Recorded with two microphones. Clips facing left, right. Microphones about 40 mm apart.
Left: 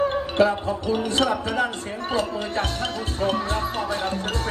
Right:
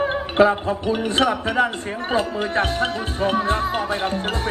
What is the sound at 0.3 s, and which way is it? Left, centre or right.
Speech, right.